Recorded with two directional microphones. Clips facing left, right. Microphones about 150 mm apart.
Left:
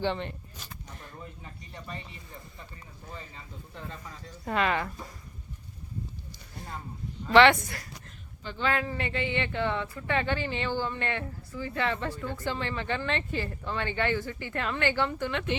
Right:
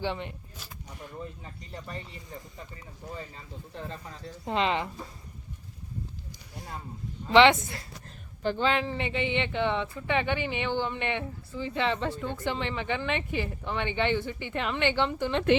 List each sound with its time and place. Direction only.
0.0 s speech: 10° right (ahead or behind)
3.8 s speech: 25° right (ahead or behind)
7.3 s speech: 20° right (ahead or behind)